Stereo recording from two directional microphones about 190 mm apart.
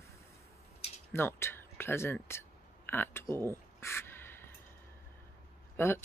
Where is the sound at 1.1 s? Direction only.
10° left (ahead or behind).